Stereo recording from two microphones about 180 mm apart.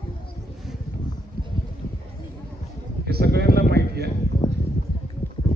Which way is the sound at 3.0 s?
60° right (ahead or behind).